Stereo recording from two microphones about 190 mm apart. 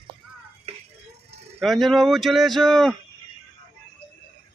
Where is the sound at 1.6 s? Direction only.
Centre (ahead or behind).